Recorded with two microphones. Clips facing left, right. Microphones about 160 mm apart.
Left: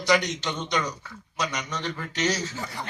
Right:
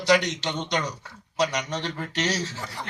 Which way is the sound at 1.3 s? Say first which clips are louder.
Right 5 dB; 30° right (ahead or behind).